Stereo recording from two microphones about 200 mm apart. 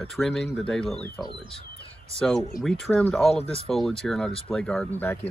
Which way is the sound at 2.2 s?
Centre (ahead or behind).